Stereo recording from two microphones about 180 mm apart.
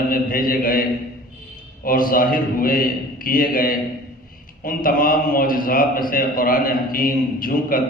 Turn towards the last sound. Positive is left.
turn(degrees=50)  # may be behind; listen again after turning